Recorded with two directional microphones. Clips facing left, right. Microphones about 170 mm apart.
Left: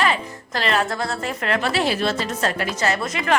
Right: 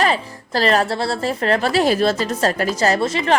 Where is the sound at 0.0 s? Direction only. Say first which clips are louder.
Right 3 dB; 35° right (ahead or behind).